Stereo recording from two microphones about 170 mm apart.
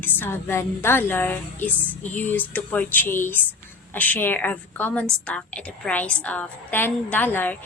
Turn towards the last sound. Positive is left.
turn(degrees=10)  # may be behind; listen again after turning